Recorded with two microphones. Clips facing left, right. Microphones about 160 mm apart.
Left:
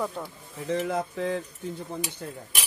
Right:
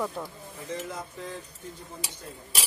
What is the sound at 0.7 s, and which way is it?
Speech, 65° left (ahead or behind).